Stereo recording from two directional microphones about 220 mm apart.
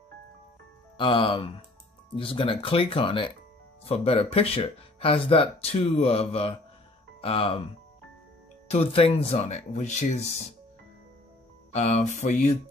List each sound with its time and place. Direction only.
0.9 s speech: 20° left (ahead or behind)
8.6 s speech: 25° left (ahead or behind)
11.7 s a sound: 30° left (ahead or behind)